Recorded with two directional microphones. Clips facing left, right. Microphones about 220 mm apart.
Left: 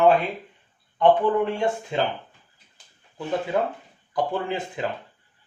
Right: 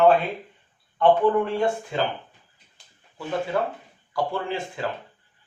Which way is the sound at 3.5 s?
20° left (ahead or behind).